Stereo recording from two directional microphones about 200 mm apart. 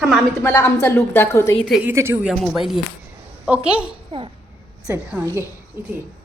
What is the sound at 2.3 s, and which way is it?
A woman's voice, centre (ahead or behind).